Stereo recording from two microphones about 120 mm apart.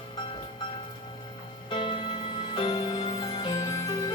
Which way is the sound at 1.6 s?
45° left (ahead or behind).